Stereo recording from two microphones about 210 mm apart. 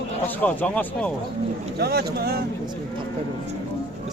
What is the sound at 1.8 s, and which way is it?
Speech, 50° right (ahead or behind).